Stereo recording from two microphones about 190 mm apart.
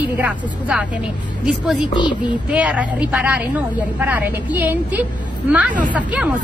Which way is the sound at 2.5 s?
5° right (ahead or behind).